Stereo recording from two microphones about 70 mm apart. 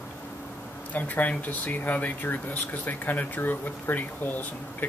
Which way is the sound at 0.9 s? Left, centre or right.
Left.